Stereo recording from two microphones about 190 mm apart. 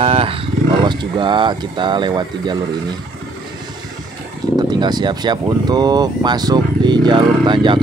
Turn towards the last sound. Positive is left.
turn(degrees=-25)  # may be behind; listen again after turning